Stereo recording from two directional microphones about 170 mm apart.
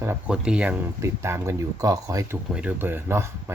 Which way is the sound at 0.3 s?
5° right (ahead or behind).